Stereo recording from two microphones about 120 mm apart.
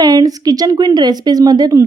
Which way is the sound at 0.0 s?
30° right (ahead or behind).